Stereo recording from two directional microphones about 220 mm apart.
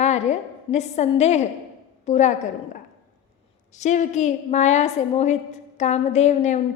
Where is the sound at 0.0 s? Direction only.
30° left (ahead or behind).